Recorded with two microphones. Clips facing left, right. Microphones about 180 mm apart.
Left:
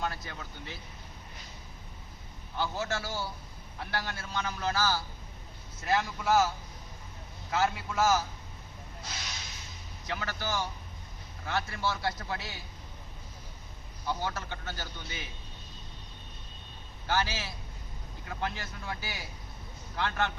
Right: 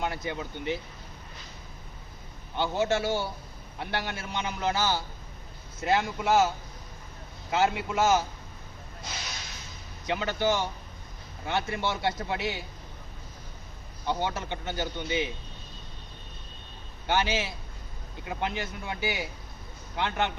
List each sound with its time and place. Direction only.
0.0 s a man's voice: 20° right (ahead or behind)
2.6 s a man's voice: 25° right (ahead or behind)
7.5 s a man's voice: 20° right (ahead or behind)
10.1 s a man's voice: 20° right (ahead or behind)
14.1 s a man's voice: 20° right (ahead or behind)
17.1 s a man's voice: 20° right (ahead or behind)